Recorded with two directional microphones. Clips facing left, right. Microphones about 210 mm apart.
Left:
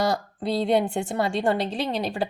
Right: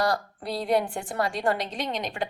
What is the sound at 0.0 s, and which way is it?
A woman's voice, 25° left (ahead or behind).